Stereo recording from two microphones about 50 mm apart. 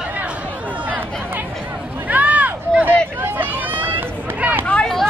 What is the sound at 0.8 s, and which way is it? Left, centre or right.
Chatter, right.